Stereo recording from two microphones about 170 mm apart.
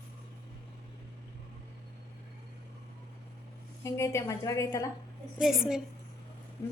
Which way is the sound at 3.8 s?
15° left (ahead or behind).